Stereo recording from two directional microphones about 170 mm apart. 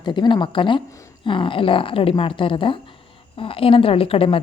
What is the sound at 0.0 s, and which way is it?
A woman's voice, 25° left (ahead or behind).